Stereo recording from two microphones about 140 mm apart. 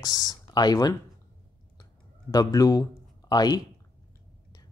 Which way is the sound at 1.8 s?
25° left (ahead or behind).